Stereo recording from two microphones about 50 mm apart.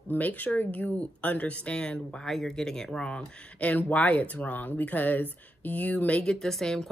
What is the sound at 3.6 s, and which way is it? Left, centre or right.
Speech, left.